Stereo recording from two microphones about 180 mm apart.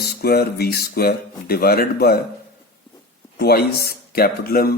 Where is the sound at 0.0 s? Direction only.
60° left (ahead or behind).